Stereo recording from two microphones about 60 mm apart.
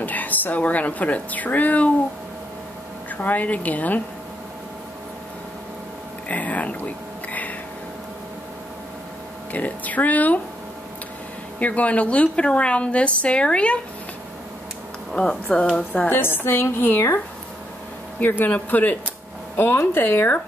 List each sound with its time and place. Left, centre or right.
0.0 s a woman's voice: left
3.1 s a woman's voice: left
6.2 s a woman's voice: left
9.5 s a woman's voice: left
11.6 s a woman's voice: left
15.1 s speech: centre
16.1 s a woman's voice: left
18.2 s a woman's voice: left
19.5 s a woman's voice: left